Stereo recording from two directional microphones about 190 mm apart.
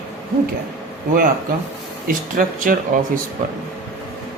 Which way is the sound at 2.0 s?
45° right (ahead or behind).